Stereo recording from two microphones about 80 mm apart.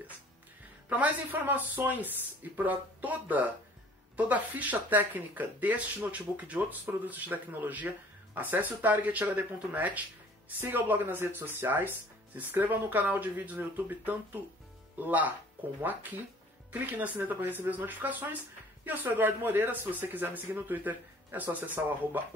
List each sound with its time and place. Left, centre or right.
0.8 s speech: centre